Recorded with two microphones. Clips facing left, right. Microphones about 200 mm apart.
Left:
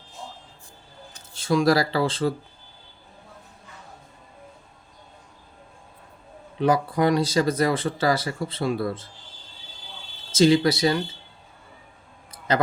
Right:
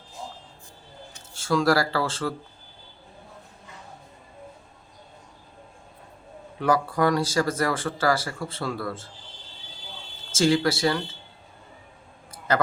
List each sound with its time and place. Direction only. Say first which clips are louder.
1.3 s speech: left 2 dB; 20° left (ahead or behind)
6.6 s speech: left 2 dB; 20° left (ahead or behind)
10.3 s speech: left 4 dB; 20° left (ahead or behind)